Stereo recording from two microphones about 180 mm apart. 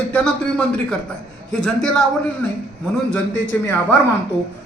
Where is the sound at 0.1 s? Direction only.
5° left (ahead or behind).